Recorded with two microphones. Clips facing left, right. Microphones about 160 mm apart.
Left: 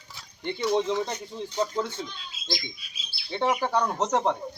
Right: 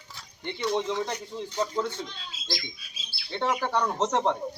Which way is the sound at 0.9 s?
20° left (ahead or behind).